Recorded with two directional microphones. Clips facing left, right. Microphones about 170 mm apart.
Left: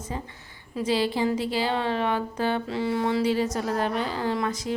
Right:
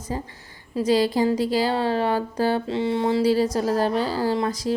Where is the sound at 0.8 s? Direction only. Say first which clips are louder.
Right 5 dB; 40° right (ahead or behind).